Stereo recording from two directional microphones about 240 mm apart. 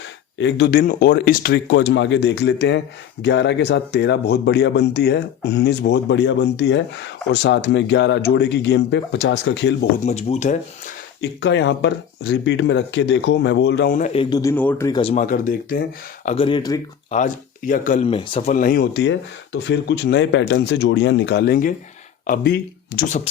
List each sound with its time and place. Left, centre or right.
0.3 s a man's voice: left
10.1 s speech: left
11.2 s a man's voice: left; by 15.1 s centre
15.1 s speech: left
16.2 s speech: left
17.1 s a man's voice: left